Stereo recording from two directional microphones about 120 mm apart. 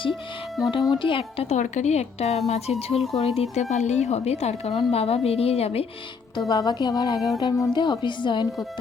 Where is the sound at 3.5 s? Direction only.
70° left (ahead or behind); by 5.8 s 55° left (ahead or behind).